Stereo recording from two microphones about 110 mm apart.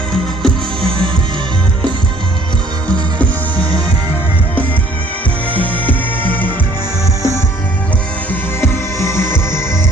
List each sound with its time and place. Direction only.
0.4 s music: 5° left (ahead or behind)
5.5 s music: 15° left (ahead or behind)